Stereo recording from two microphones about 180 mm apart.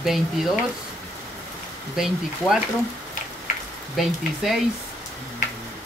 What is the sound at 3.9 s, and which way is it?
Speech, centre (ahead or behind).